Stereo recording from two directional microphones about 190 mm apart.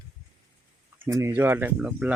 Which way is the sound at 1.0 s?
15° right (ahead or behind).